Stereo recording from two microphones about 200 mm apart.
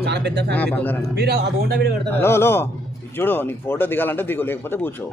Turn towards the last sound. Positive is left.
turn(degrees=10)  # may be behind; listen again after turning